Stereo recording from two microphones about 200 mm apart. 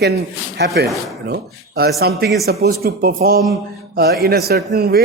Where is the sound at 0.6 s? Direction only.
55° right (ahead or behind).